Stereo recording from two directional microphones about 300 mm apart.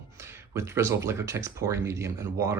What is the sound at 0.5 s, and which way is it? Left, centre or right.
Speech, centre.